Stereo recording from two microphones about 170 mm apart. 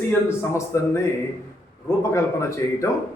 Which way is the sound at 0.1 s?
15° left (ahead or behind).